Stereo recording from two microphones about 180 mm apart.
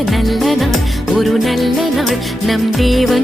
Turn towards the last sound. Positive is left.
turn(degrees=0)  # may be behind; listen again after turning